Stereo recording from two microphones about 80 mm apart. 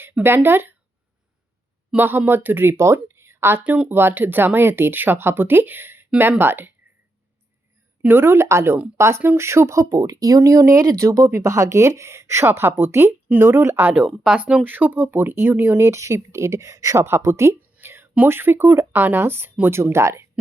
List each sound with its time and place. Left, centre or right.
0.0 s speech: right
2.0 s speech: right
3.6 s speech: centre
8.0 s speech: right
13.8 s speech: centre
15.9 s speech: right
17.6 s a sound: right
18.3 s speech: right